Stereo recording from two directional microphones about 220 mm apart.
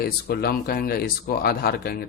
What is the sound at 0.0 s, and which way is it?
A man's voice, 45° left (ahead or behind).